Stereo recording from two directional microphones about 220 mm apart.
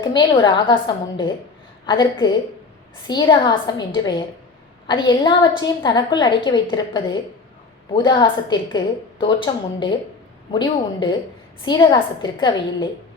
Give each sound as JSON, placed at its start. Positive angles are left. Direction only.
{"t": 0.0, "sound": "a woman's voice", "side_deg": 20}